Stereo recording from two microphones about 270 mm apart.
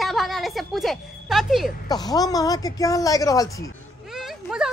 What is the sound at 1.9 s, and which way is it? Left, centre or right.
Speech, centre.